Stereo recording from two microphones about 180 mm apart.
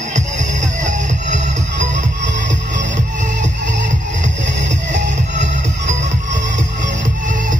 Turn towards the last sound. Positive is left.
turn(degrees=-40)  # may be behind; listen again after turning